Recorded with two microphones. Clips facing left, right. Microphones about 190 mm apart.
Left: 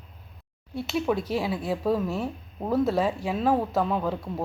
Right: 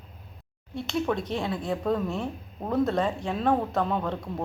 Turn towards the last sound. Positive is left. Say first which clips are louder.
# left 2 dB
turn(degrees=5)  # may be behind; listen again after turning